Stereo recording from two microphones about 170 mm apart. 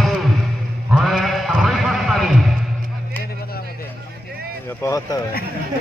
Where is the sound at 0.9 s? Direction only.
Centre (ahead or behind).